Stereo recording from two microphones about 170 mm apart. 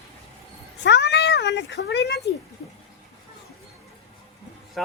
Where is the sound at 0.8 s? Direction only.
90° left.